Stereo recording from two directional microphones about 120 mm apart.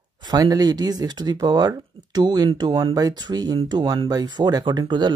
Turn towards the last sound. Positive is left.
turn(degrees=-35)  # may be behind; listen again after turning